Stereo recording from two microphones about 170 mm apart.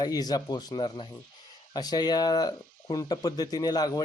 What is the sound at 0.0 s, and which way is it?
Speech, 25° left (ahead or behind).